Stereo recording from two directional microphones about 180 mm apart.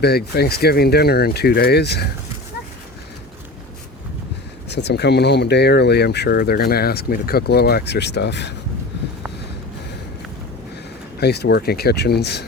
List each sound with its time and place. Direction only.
0.0 s speech: 60° left (ahead or behind)
4.7 s speech: 70° left (ahead or behind)
11.2 s speech: 65° left (ahead or behind)